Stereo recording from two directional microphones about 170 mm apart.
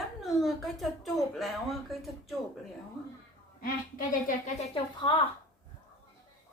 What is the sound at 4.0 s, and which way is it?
Speech, 50° left (ahead or behind).